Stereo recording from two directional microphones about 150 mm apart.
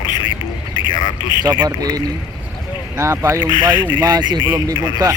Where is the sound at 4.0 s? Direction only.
25° right (ahead or behind).